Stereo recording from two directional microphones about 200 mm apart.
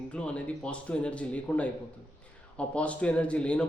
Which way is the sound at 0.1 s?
5° left (ahead or behind).